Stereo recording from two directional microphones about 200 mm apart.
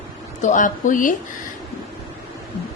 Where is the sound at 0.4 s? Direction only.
40° left (ahead or behind).